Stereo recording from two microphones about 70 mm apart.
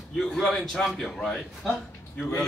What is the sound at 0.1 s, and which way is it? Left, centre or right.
A woman's voice, centre.